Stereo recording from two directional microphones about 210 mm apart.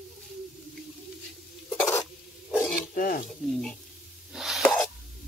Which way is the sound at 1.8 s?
10° left (ahead or behind).